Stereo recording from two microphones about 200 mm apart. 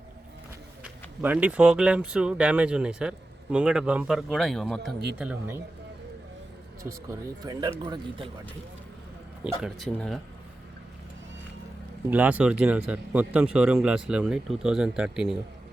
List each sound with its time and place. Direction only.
1.2 s speech: 5° right (ahead or behind)
6.8 s speech: 20° right (ahead or behind)
9.4 s speech: centre (ahead or behind)
12.1 s speech: 5° right (ahead or behind)